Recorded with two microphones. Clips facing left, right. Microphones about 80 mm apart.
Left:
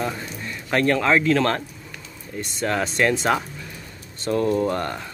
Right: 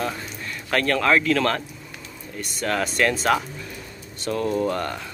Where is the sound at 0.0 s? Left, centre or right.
Centre.